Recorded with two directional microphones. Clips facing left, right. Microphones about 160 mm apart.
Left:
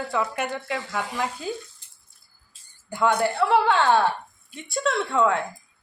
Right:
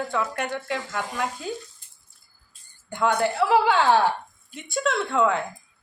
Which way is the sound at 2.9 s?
Centre (ahead or behind).